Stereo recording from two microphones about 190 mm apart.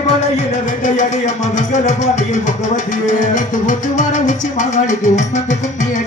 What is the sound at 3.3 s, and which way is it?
Music, 40° left (ahead or behind).